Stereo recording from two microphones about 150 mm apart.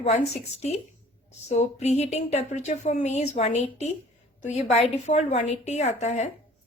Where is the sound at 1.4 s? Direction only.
45° left (ahead or behind).